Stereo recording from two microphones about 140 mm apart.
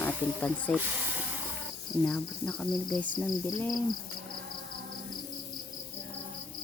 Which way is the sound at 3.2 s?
25° left (ahead or behind).